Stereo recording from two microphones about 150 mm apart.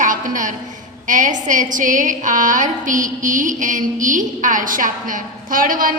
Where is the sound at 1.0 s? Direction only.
60° right (ahead or behind).